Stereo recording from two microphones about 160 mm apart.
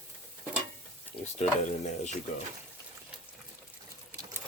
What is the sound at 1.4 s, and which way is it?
Speech, 45° left (ahead or behind).